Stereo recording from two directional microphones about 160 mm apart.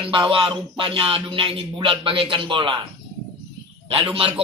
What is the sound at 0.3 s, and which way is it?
Music, 35° right (ahead or behind).